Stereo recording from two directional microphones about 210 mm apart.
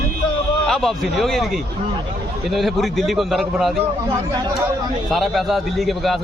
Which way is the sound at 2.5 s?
Centre (ahead or behind).